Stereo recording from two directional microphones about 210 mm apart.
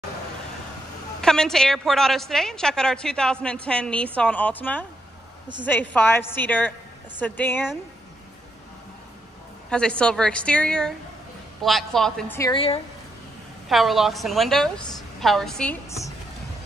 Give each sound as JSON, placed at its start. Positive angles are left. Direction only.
{"t": 1.2, "sound": "a woman's voice", "side_deg": 5}
{"t": 9.7, "sound": "a woman's voice", "side_deg": 5}
{"t": 12.4, "sound": "speech", "side_deg": 20}
{"t": 13.7, "sound": "a woman's voice", "side_deg": 0}